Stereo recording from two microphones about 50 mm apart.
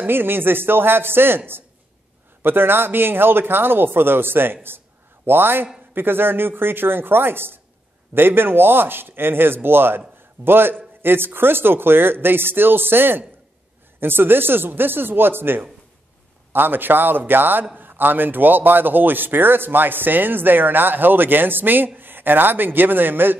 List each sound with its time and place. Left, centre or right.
0.0 s speech: right
4.6 s a sound: right
5.9 s a man's voice: right